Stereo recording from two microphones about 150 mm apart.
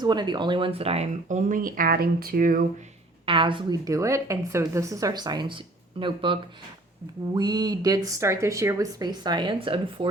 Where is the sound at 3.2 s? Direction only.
35° right (ahead or behind).